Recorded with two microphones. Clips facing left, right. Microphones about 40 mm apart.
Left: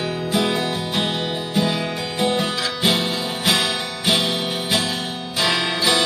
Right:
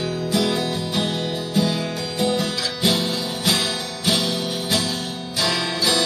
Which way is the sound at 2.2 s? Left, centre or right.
Left.